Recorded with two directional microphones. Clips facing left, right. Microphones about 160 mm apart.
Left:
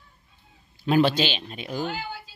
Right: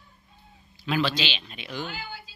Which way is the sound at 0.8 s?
45° left (ahead or behind).